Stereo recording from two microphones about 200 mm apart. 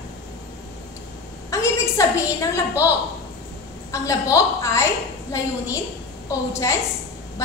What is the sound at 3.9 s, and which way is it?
Speech, 15° left (ahead or behind).